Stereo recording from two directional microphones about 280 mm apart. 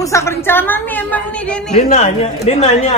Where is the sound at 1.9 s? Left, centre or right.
Left.